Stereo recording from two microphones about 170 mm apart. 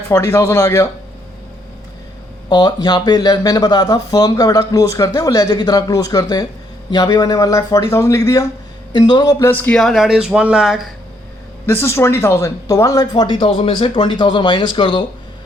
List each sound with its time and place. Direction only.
0.1 s speech: 15° left (ahead or behind)
2.5 s speech: 25° left (ahead or behind); by 10.8 s centre (ahead or behind)
11.6 s speech: 15° left (ahead or behind)